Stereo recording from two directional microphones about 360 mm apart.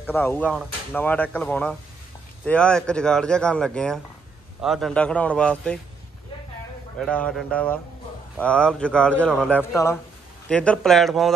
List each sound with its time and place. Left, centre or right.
0.0 s speech: centre
7.0 s speech: centre